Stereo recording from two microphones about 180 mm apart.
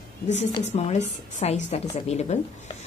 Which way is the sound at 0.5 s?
35° left (ahead or behind).